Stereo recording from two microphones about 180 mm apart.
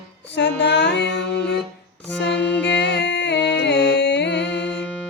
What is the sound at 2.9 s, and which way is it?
Music, 75° left (ahead or behind).